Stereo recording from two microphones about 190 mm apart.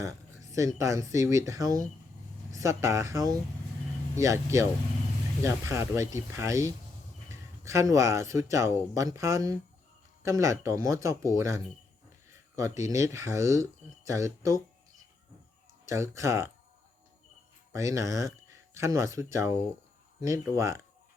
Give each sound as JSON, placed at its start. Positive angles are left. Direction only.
{"t": 0.5, "sound": "speech", "side_deg": -15}
{"t": 15.9, "sound": "speech", "side_deg": -15}
{"t": 17.7, "sound": "speech", "side_deg": -15}
{"t": 20.6, "sound": "speech", "side_deg": -15}